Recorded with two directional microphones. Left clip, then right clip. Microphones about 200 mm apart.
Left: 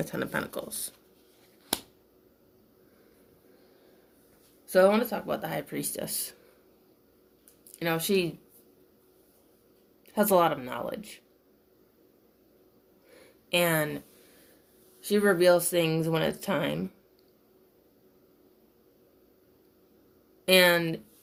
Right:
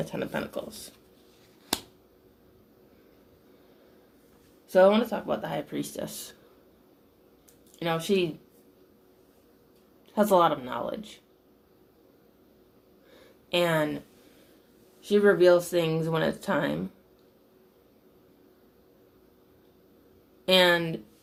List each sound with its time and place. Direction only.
0.0 s speech: 50° left (ahead or behind)
1.7 s finger snapping: 10° left (ahead or behind)
4.7 s speech: 40° left (ahead or behind)
7.8 s speech: 50° left (ahead or behind)
10.2 s speech: 45° left (ahead or behind)
10.9 s speech: centre (ahead or behind)
13.5 s speech: 50° left (ahead or behind)
15.1 s speech: 50° left (ahead or behind)
20.4 s speech: 45° left (ahead or behind)